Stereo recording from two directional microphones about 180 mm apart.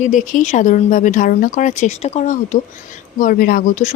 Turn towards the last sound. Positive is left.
turn(degrees=45)  # may be behind; listen again after turning